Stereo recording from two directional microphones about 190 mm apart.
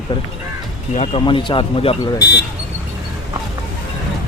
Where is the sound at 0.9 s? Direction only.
35° left (ahead or behind).